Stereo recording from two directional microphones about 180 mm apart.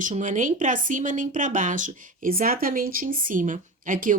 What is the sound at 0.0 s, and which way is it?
Speech, 45° right (ahead or behind).